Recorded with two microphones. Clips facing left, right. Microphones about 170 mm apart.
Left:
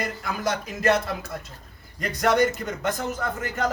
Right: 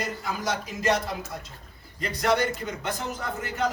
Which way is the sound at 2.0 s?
50° left (ahead or behind).